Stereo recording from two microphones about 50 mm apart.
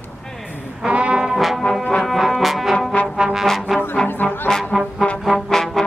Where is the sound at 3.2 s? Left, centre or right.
Centre.